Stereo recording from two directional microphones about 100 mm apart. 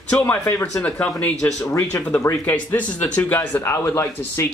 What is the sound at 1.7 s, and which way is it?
Speech, 30° left (ahead or behind).